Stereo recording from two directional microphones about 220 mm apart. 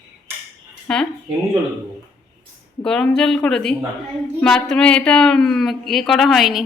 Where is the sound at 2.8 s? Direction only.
5° left (ahead or behind).